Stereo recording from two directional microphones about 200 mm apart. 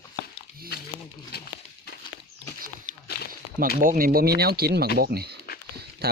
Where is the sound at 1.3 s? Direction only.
55° left (ahead or behind).